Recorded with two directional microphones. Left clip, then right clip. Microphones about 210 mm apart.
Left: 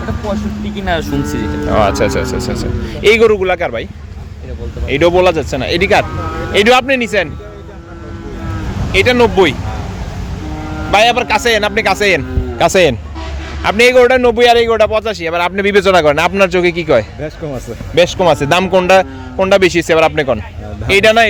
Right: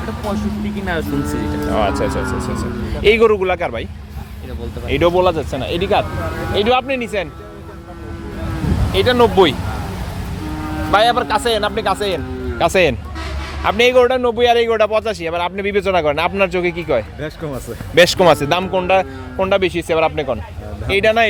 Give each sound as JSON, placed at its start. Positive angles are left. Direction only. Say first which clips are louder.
{"t": 0.9, "sound": "a man's voice", "louder": "left 5 dB", "side_deg": 30}
{"t": 4.9, "sound": "a man's voice", "louder": "left 4 dB", "side_deg": 15}
{"t": 8.9, "sound": "speech", "louder": "left 3 dB", "side_deg": 10}
{"t": 10.9, "sound": "speech", "louder": "left 4 dB", "side_deg": 15}
{"t": 12.5, "sound": "a man's voice", "louder": "left 4 dB", "side_deg": 15}
{"t": 17.2, "sound": "speech", "louder": "left 3 dB", "side_deg": 5}
{"t": 18.3, "sound": "a man's voice", "louder": "left 6 dB", "side_deg": 20}